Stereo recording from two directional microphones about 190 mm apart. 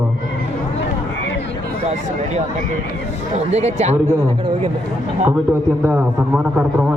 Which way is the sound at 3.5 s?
35° right (ahead or behind).